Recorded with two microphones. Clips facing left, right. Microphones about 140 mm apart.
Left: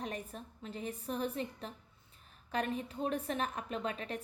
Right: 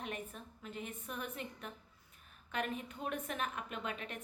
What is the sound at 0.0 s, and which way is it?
A woman's voice, 35° left (ahead or behind).